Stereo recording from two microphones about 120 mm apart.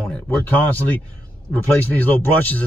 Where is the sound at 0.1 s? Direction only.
15° left (ahead or behind).